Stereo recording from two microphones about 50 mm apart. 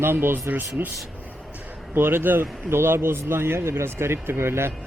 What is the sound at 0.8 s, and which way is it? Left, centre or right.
Speech, right.